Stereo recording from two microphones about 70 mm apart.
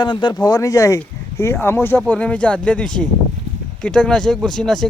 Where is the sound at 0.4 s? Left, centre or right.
Left.